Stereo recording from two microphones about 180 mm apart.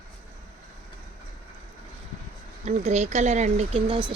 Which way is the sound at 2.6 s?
40° right (ahead or behind).